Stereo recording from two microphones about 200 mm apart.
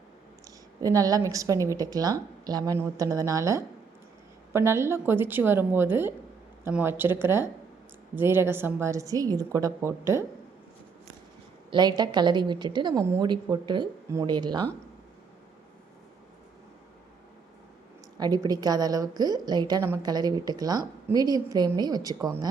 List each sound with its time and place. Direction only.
0.4 s a woman's voice: 15° right (ahead or behind)
11.7 s a woman's voice: 20° right (ahead or behind)
18.2 s a woman's voice: 20° right (ahead or behind)